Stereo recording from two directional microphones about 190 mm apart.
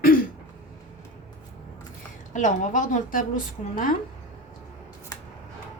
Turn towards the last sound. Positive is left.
turn(degrees=45)  # may be behind; listen again after turning